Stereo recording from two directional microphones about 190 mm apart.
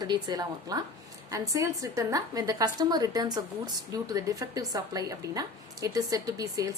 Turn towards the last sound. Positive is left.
turn(degrees=-20)  # may be behind; listen again after turning